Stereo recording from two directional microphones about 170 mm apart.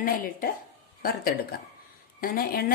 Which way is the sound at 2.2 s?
60° left (ahead or behind).